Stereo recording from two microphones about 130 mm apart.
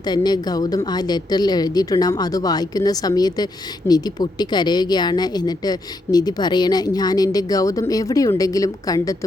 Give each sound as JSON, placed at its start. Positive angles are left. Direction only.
{"t": 0.0, "sound": "speech", "side_deg": 35}